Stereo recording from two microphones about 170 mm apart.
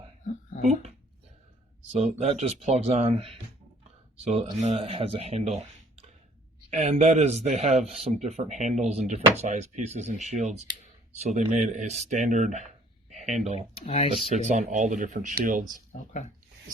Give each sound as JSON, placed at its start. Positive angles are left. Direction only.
{"t": 0.6, "sound": "speech", "side_deg": -45}
{"t": 1.9, "sound": "speech", "side_deg": -40}
{"t": 6.7, "sound": "speech", "side_deg": -40}
{"t": 13.1, "sound": "a sound", "side_deg": -45}
{"t": 13.7, "sound": "speech", "side_deg": 35}
{"t": 14.3, "sound": "speech", "side_deg": -45}
{"t": 15.9, "sound": "speech", "side_deg": 45}